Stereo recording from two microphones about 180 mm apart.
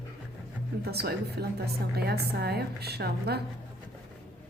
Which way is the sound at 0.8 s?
60° right (ahead or behind).